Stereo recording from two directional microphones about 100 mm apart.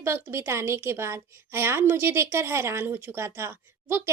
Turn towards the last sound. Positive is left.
turn(degrees=-25)  # may be behind; listen again after turning